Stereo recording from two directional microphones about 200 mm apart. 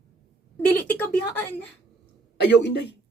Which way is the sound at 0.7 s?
10° left (ahead or behind).